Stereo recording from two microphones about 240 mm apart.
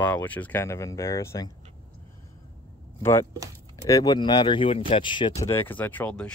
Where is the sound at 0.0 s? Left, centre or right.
Centre.